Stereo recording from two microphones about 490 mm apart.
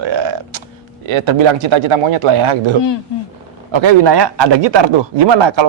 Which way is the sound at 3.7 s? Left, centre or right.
Right.